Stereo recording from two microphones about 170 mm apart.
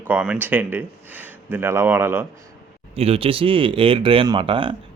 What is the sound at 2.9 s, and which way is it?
Speech, 35° right (ahead or behind).